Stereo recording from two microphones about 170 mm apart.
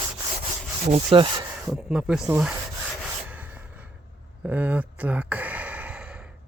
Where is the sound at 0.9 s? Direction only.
30° right (ahead or behind).